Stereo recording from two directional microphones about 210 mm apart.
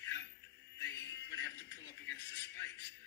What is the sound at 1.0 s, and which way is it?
Music, 55° left (ahead or behind).